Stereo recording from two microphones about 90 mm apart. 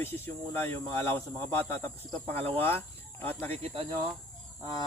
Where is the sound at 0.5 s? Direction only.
25° left (ahead or behind).